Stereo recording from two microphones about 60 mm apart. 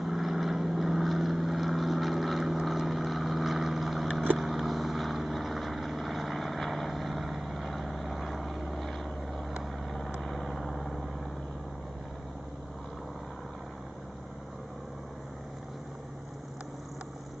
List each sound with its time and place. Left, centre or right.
0.0 s vehicle: centre